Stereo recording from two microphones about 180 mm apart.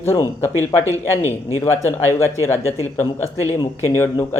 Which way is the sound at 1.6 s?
15° left (ahead or behind).